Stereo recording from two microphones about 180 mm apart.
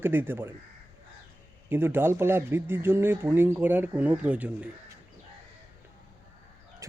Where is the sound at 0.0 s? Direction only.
10° right (ahead or behind).